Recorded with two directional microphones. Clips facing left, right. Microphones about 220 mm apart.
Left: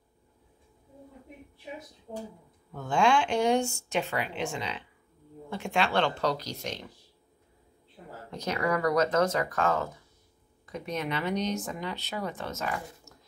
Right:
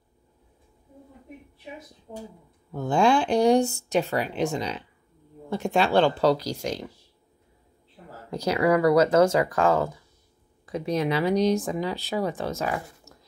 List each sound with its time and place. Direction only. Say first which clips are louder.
2.7 s speech: right 4 dB; 35° right (ahead or behind)
8.3 s speech: right 7 dB; 35° right (ahead or behind)